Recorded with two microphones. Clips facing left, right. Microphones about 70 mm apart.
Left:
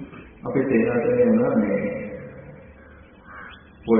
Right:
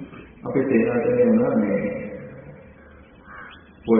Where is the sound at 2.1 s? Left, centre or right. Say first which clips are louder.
Even; left.